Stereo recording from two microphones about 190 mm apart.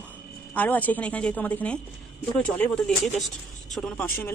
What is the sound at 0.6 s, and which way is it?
Speech, 10° left (ahead or behind).